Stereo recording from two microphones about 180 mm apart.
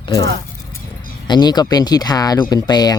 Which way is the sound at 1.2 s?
25° left (ahead or behind).